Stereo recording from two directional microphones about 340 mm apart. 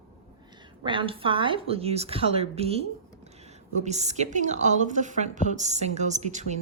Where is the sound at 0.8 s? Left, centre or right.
Centre.